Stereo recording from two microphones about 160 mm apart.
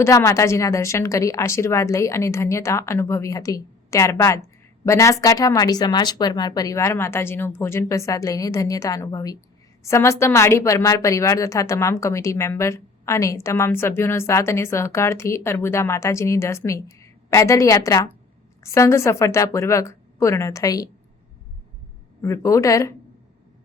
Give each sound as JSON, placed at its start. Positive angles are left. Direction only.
{"t": 0.0, "sound": "a woman's voice", "side_deg": 20}
{"t": 22.2, "sound": "a woman's voice", "side_deg": 20}